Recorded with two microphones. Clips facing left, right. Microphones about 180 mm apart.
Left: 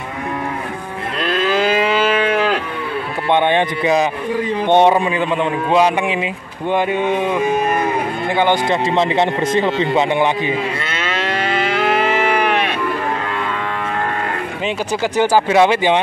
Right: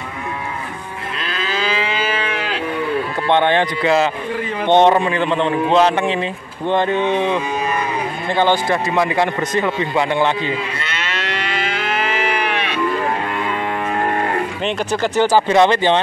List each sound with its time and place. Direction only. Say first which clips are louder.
1.6 s moo: left 4 dB; 55° left (ahead or behind)
3.3 s a man's voice: left 1 dB; 15° left (ahead or behind)
7.4 s cattle: left 4 dB; 50° left (ahead or behind)
8.4 s speech: even; 20° left (ahead or behind)
12.2 s livestock: left 4 dB; 45° left (ahead or behind)
14.9 s a man's voice: even; 10° left (ahead or behind)